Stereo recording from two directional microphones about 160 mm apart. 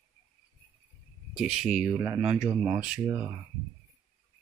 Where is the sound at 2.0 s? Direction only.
15° right (ahead or behind).